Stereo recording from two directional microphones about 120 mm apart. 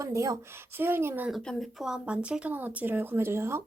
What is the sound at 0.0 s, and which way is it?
Speech, 25° right (ahead or behind).